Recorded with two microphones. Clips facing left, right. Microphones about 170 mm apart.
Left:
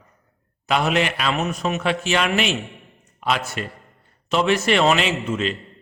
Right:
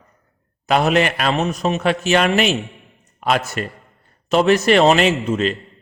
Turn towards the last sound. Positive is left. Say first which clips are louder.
# right 5 dB
turn(degrees=-45)  # may be behind; listen again after turning